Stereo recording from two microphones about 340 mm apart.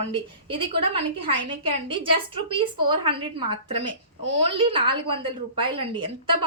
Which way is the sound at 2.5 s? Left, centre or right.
Centre.